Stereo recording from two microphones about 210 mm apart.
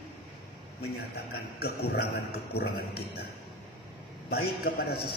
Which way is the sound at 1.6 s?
50° left (ahead or behind).